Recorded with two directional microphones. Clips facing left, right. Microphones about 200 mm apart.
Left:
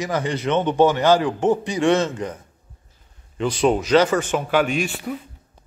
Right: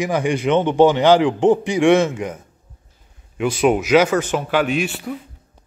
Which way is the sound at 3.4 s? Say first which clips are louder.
Right 2 dB; 10° right (ahead or behind).